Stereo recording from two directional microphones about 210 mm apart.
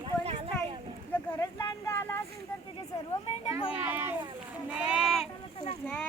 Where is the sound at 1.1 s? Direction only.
10° left (ahead or behind).